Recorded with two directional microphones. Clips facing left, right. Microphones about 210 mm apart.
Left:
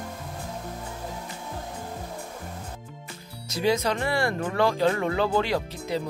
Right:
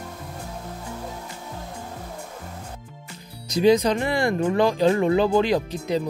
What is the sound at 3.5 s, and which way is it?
Speech, 15° right (ahead or behind).